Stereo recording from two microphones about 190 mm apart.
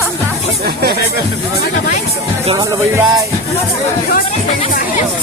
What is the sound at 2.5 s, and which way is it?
Speech, 15° right (ahead or behind).